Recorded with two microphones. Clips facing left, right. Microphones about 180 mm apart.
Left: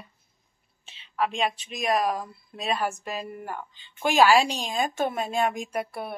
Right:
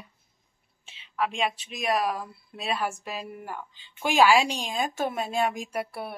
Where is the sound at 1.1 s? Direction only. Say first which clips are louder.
Left 1 dB; 5° right (ahead or behind).